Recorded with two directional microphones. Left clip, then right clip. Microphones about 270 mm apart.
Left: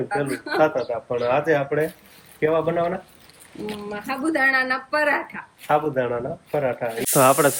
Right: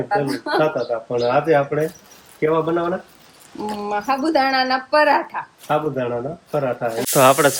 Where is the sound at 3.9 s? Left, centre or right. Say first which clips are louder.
Right 6 dB; centre.